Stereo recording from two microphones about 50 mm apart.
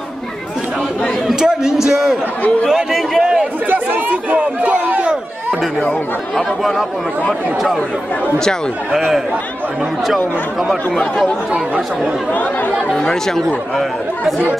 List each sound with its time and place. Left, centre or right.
1.3 s a sound: centre
3.6 s chatter: right
6.3 s speech: centre
12.9 s speech: centre